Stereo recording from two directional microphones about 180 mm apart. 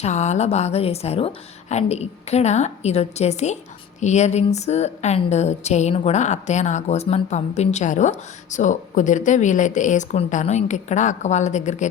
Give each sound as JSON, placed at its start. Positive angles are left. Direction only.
{"t": 0.0, "sound": "a woman's voice", "side_deg": 40}